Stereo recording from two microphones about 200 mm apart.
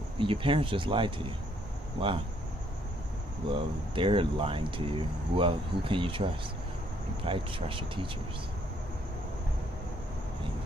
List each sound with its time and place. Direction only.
0.2 s speech: 25° right (ahead or behind)
3.5 s speech: 25° right (ahead or behind)
7.2 s speech: 25° right (ahead or behind)